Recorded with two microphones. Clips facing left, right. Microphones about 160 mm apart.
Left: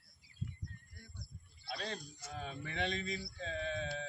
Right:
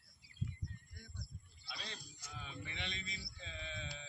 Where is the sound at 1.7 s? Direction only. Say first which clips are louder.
Left 9 dB; 50° left (ahead or behind).